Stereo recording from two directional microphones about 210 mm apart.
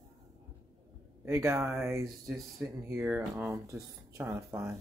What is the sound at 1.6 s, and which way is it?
Speech, centre (ahead or behind).